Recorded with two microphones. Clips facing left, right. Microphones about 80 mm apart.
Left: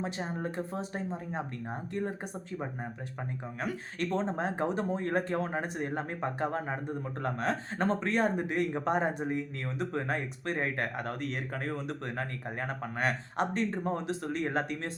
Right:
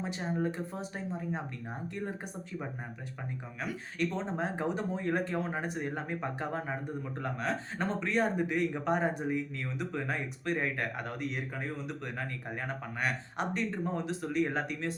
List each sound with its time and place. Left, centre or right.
0.0 s speech: left
4.3 s speech: left
11.2 s speech: left